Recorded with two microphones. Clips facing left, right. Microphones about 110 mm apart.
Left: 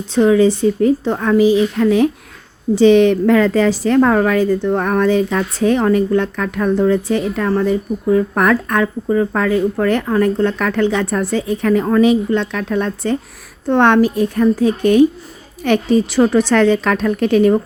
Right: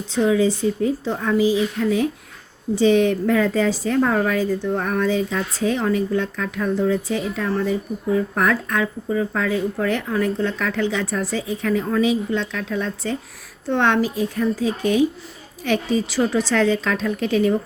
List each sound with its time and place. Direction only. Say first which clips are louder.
0.1 s a woman's voice: left 6 dB; 65° left (ahead or behind)